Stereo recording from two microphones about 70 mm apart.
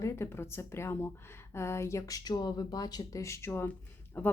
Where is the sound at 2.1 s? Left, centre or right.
Left.